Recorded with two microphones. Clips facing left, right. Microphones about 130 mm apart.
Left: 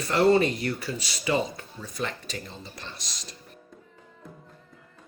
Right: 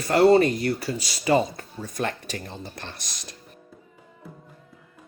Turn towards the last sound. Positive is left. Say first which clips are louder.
# right 3 dB
turn(degrees=-55)  # may be behind; listen again after turning